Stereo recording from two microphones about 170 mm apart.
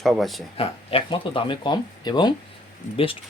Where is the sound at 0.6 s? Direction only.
30° left (ahead or behind).